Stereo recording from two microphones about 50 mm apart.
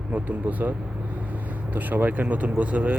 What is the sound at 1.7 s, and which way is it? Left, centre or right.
Speech, right.